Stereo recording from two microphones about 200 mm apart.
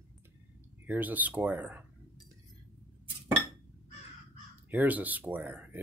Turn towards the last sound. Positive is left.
turn(degrees=-10)  # may be behind; listen again after turning